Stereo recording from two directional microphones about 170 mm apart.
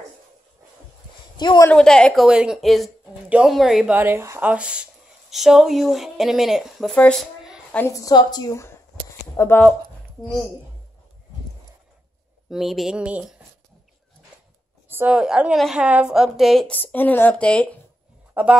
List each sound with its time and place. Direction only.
1.3 s speech: 25° left (ahead or behind)
1.7 s speech: 5° left (ahead or behind)
7.7 s a woman's voice: 15° left (ahead or behind)
12.4 s speech: centre (ahead or behind)
14.9 s speech: 10° right (ahead or behind); by 17.7 s 5° left (ahead or behind)
18.3 s speech: 10° right (ahead or behind)